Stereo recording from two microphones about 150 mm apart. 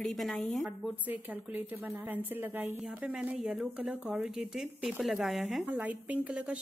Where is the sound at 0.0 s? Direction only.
Centre (ahead or behind).